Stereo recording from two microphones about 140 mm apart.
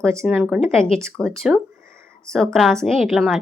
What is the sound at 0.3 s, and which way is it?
A woman's voice, 5° right (ahead or behind).